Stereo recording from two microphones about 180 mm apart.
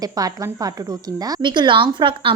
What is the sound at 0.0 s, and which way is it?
A woman's voice, 20° right (ahead or behind).